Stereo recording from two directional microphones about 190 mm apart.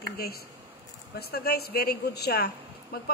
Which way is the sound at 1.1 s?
55° left (ahead or behind).